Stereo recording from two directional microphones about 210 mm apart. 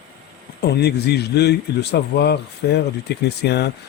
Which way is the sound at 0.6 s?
50° left (ahead or behind).